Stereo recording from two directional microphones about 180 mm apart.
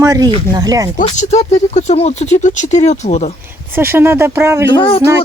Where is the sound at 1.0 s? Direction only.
40° left (ahead or behind).